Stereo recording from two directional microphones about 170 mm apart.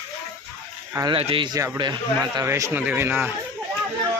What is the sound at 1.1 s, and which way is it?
A man's voice, 30° right (ahead or behind).